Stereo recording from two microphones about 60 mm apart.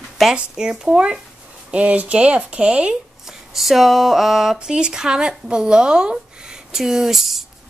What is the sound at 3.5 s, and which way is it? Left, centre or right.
Speech, centre.